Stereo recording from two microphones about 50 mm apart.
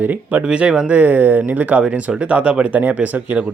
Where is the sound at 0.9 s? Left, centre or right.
Right.